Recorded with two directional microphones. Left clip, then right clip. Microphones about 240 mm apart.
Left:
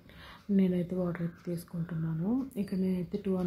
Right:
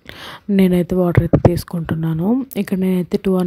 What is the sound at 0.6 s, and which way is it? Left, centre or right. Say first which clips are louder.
Speech: right 16 dB; right.